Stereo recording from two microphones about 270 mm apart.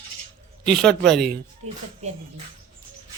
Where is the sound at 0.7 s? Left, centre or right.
Centre.